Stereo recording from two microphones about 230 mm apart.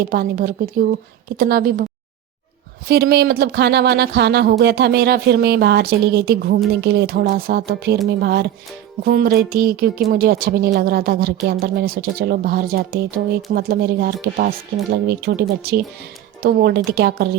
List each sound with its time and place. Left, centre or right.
0.0 s speech: right
2.8 s speech: right